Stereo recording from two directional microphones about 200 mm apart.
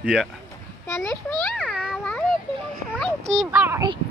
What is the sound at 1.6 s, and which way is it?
Cat, 5° right (ahead or behind).